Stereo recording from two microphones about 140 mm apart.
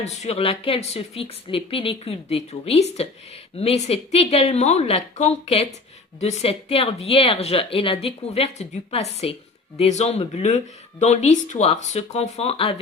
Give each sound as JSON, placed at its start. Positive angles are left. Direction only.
{"t": 0.0, "sound": "speech", "side_deg": 50}